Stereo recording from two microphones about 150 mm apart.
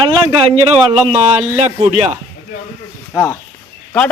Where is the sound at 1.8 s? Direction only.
50° right (ahead or behind).